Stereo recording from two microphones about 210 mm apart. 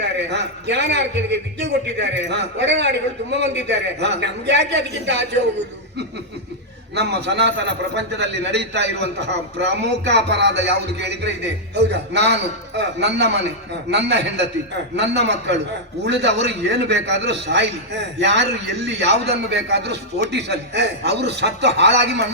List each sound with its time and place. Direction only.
0.0 s a man's voice: 55° right (ahead or behind)
6.9 s a man's voice: 55° right (ahead or behind)